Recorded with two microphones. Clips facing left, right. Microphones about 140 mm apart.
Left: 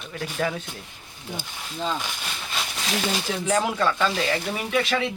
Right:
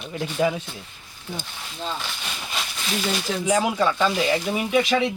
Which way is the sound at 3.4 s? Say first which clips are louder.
Right 2 dB; 10° right (ahead or behind).